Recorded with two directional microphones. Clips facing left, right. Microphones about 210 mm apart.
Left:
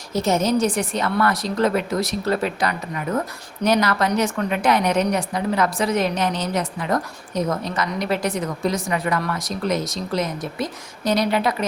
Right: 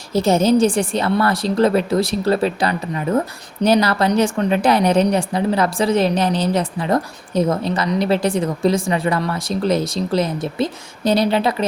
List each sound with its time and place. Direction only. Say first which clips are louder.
0.1 s a woman's voice: right 5 dB; 30° right (ahead or behind)